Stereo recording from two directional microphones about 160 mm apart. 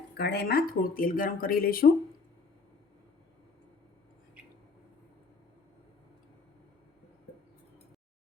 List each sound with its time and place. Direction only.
0.1 s speech: 90° left; by 1.9 s 65° left (ahead or behind)